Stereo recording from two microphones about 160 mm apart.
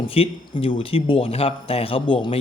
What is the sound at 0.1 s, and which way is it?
A man's voice, 35° left (ahead or behind).